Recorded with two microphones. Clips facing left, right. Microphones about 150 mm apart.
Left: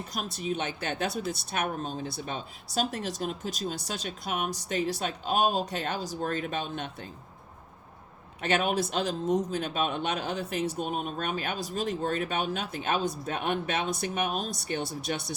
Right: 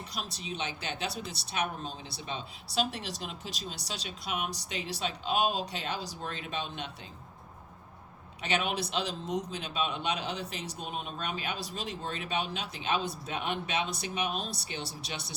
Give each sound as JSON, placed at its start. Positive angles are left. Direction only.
{"t": 0.1, "sound": "speech", "side_deg": 50}
{"t": 8.4, "sound": "speech", "side_deg": 50}